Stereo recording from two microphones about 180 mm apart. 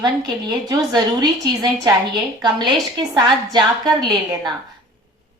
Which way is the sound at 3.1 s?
25° right (ahead or behind).